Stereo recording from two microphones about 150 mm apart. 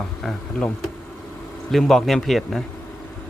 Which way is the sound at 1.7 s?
Centre (ahead or behind).